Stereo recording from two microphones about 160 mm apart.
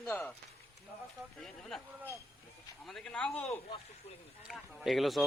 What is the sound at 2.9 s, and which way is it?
A man's voice, centre (ahead or behind).